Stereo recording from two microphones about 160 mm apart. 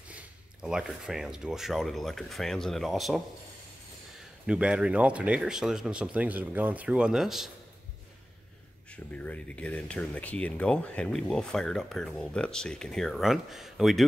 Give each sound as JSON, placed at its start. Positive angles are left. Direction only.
{"t": 0.1, "sound": "speech", "side_deg": -5}
{"t": 4.5, "sound": "speech", "side_deg": -5}
{"t": 8.9, "sound": "speech", "side_deg": 10}